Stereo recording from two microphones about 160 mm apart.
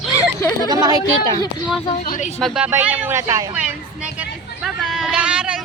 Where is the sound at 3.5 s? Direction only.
10° right (ahead or behind).